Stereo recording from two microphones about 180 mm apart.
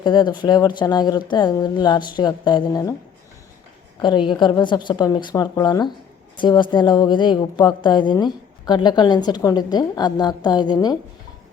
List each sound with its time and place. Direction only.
0.0 s a woman's voice: 25° left (ahead or behind)
4.3 s a woman's voice: 25° left (ahead or behind)